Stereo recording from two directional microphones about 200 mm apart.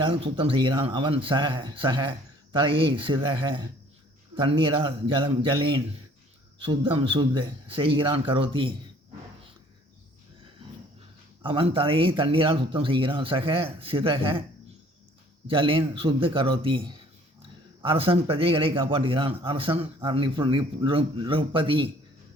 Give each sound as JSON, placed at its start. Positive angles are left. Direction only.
{"t": 0.0, "sound": "speech", "side_deg": -25}
{"t": 11.4, "sound": "speech", "side_deg": -25}
{"t": 15.4, "sound": "speech", "side_deg": -25}